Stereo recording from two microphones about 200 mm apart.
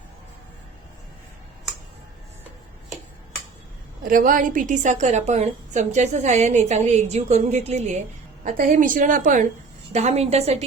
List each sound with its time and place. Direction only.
4.0 s a woman's voice: 45° right (ahead or behind)